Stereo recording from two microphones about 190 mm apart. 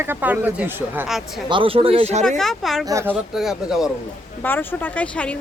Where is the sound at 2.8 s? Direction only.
15° right (ahead or behind).